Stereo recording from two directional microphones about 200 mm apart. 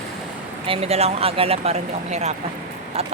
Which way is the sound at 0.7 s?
30° right (ahead or behind).